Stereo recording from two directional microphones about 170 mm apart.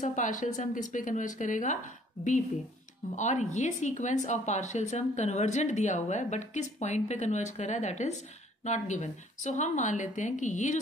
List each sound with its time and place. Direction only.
0.0 s a woman's voice: 50° left (ahead or behind)
3.2 s a woman's voice: 45° left (ahead or behind)